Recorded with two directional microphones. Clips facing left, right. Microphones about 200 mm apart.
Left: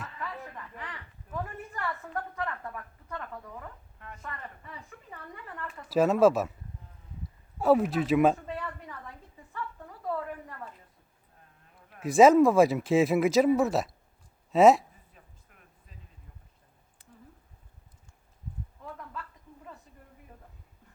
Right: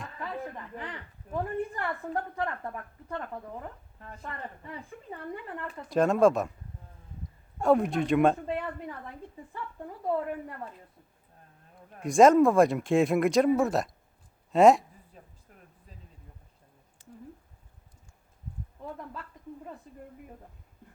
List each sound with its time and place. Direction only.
0.2 s a woman's voice: 25° right (ahead or behind)
5.9 s speech: 5° left (ahead or behind)
7.6 s speech: 5° left (ahead or behind)
9.5 s a woman's voice: 30° right (ahead or behind)
11.9 s speech: 5° left (ahead or behind)
15.2 s a sound: 35° right (ahead or behind)